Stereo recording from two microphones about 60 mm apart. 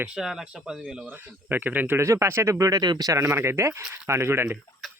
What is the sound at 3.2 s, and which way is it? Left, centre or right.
Speech, right.